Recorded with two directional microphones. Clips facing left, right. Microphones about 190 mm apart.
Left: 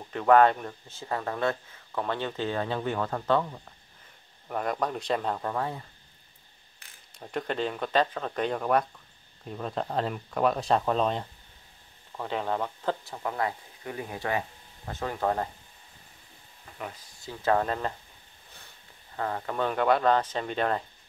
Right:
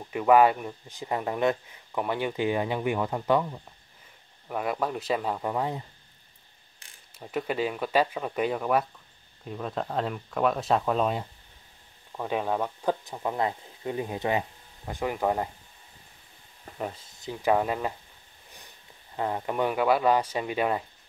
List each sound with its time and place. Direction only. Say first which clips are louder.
0.1 s speech: even; 10° right (ahead or behind)
7.2 s speech: right 2 dB; 5° right (ahead or behind)
16.7 s speech: right 5 dB; 30° right (ahead or behind); by 17.9 s 10° right (ahead or behind)
19.1 s speech: right 2 dB; 15° right (ahead or behind)